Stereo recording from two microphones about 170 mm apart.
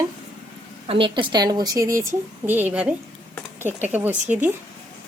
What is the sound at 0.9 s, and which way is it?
A woman's voice, 30° right (ahead or behind).